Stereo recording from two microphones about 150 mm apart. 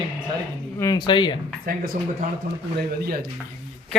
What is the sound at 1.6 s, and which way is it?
Speech, 70° right (ahead or behind).